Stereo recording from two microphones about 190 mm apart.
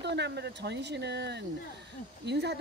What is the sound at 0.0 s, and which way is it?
Speech, 65° right (ahead or behind).